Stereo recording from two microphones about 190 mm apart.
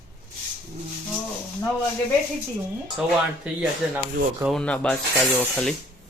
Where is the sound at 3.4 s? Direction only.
10° right (ahead or behind).